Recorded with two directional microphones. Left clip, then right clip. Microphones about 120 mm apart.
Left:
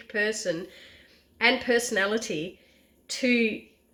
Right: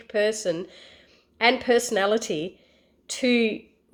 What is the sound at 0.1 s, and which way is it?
A woman's voice, 45° right (ahead or behind).